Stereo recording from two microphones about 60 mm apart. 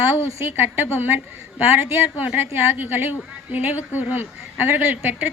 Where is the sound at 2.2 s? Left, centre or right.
Right.